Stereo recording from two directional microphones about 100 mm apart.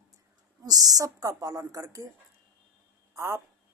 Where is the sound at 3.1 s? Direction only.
30° right (ahead or behind).